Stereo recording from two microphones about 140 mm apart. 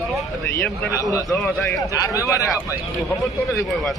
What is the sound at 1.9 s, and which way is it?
Speech, 25° left (ahead or behind).